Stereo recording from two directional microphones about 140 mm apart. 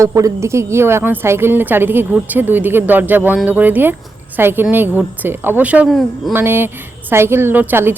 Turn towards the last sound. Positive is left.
turn(degrees=-15)  # may be behind; listen again after turning